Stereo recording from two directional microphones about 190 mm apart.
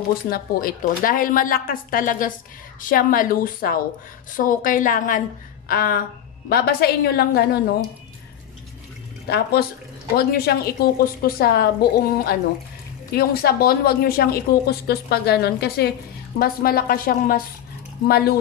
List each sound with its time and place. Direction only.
0.3 s a woman's voice: 50° left (ahead or behind)
9.3 s a woman's voice: 55° left (ahead or behind)